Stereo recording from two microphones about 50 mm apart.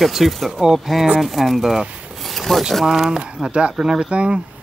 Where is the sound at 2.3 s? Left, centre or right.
Centre.